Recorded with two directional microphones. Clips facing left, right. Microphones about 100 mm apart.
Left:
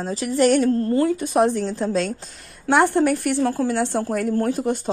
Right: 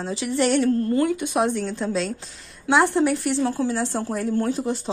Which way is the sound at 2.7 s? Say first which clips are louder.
Left 2 dB; 55° left (ahead or behind).